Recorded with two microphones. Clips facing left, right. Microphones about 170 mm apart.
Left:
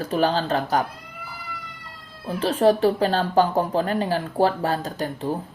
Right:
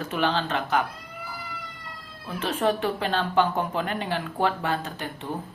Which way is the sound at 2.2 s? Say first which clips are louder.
Left 6 dB; 35° left (ahead or behind).